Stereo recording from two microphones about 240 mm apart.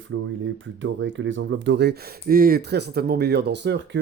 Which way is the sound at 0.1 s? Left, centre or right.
Right.